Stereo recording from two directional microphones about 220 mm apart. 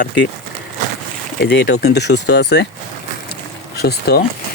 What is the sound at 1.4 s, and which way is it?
Speech, 50° left (ahead or behind).